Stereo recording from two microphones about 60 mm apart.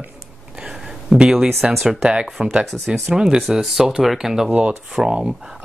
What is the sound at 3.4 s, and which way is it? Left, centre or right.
Speech, centre.